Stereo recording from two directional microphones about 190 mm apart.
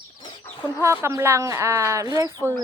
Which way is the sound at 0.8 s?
15° right (ahead or behind).